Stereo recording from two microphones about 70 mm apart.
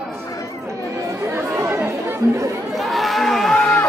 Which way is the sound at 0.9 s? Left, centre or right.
Right.